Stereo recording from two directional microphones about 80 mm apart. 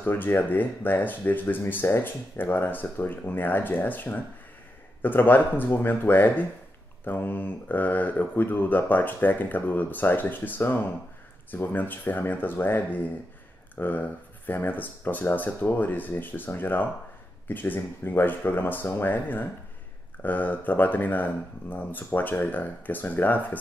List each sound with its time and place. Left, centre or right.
0.0 s speech: left